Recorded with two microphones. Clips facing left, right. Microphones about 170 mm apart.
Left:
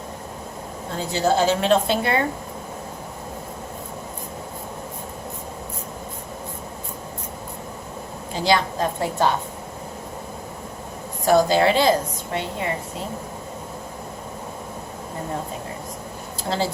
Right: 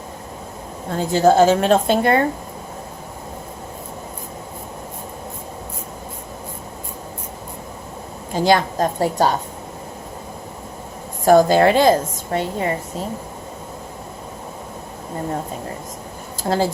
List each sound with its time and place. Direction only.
0.9 s a woman's voice: 50° right (ahead or behind)
8.3 s a woman's voice: 45° right (ahead or behind)
11.3 s a woman's voice: 50° right (ahead or behind)
16.4 s speech: 50° right (ahead or behind)